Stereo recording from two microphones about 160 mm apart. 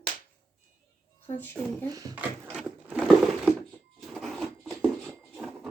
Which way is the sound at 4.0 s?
Centre (ahead or behind).